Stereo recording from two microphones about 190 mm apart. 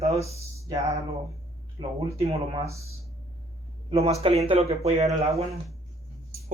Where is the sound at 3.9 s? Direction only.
30° right (ahead or behind).